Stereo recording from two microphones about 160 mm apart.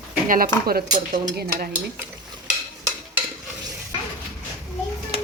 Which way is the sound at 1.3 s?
80° right.